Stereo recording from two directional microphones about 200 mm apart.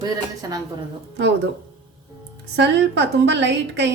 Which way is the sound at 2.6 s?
60° right (ahead or behind).